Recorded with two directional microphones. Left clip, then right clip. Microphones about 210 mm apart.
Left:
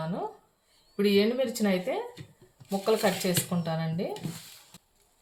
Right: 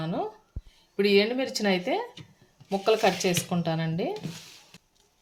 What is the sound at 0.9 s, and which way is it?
Speech, 55° right (ahead or behind).